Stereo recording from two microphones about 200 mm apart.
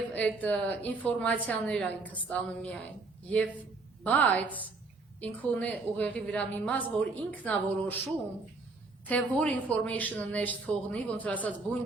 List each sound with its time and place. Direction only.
0.1 s a woman's voice: 10° left (ahead or behind)
9.0 s a woman's voice: 5° left (ahead or behind)